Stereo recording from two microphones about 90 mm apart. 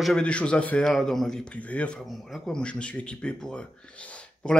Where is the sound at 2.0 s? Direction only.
Centre (ahead or behind).